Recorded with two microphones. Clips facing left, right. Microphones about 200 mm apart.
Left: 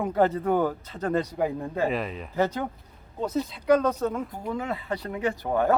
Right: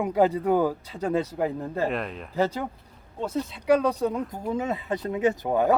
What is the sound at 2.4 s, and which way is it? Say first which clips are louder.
Speech: even; 10° right (ahead or behind).